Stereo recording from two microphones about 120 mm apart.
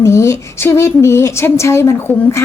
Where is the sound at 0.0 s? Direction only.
25° left (ahead or behind).